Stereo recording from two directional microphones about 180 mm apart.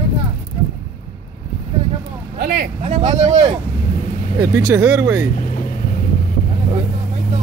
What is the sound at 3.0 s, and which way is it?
Speech, 35° right (ahead or behind).